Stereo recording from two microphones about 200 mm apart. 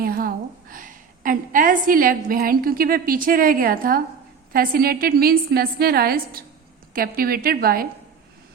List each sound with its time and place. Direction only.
0.0 s a woman's voice: 45° right (ahead or behind)